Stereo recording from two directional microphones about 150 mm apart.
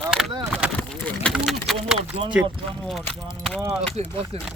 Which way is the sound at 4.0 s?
50° right (ahead or behind).